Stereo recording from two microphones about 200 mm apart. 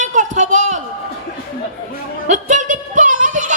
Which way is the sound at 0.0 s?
40° right (ahead or behind).